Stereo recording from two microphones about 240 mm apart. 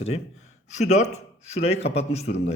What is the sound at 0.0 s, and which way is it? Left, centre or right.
A man's voice, left.